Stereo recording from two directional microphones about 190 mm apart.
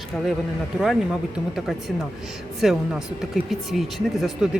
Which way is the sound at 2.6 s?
Centre (ahead or behind).